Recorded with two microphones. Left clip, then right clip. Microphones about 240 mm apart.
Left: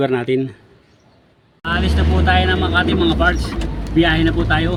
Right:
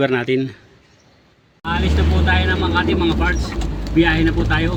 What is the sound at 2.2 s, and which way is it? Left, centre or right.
Speech, left.